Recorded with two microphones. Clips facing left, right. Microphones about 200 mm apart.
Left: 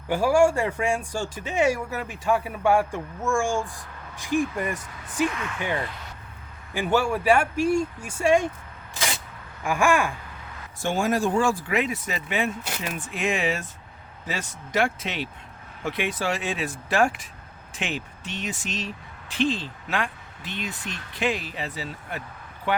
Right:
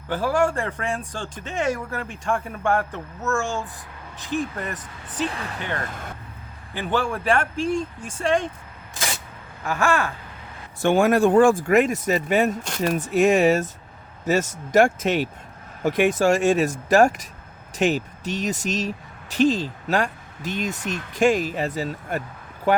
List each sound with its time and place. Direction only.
0.1 s speech: 10° left (ahead or behind)
5.3 s speech: 35° right (ahead or behind)
5.8 s speech: 50° right (ahead or behind)
6.7 s speech: 10° left (ahead or behind)
9.6 s speech: 10° left (ahead or behind)
10.8 s speech: 60° right (ahead or behind); by 22.8 s 40° right (ahead or behind)